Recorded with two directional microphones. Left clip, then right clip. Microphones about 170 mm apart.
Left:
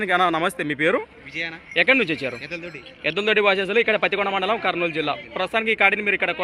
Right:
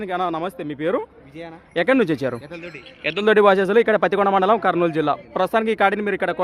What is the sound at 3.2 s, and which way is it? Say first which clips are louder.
A man's voice: right 5 dB; 55° right (ahead or behind).